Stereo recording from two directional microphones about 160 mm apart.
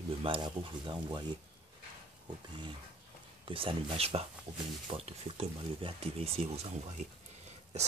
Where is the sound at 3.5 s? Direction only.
35° right (ahead or behind).